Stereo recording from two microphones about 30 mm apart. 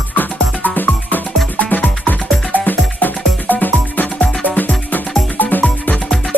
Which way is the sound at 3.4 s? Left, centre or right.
Left.